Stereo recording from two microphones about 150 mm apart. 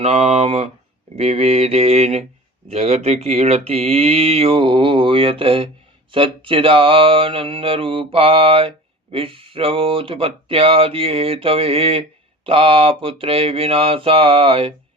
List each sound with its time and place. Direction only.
0.0 s mantra: 45° right (ahead or behind)
2.6 s speech: 45° right (ahead or behind)